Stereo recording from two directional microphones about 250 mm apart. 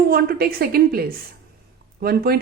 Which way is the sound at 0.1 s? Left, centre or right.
Right.